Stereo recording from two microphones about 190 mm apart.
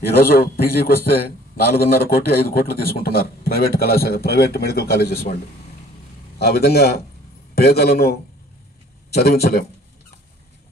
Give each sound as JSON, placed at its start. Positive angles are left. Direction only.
{"t": 0.2, "sound": "a man's voice", "side_deg": 55}
{"t": 6.3, "sound": "a man's voice", "side_deg": 55}